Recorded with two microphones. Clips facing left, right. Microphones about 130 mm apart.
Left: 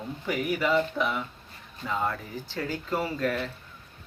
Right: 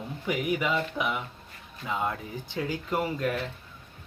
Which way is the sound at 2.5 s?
15° right (ahead or behind).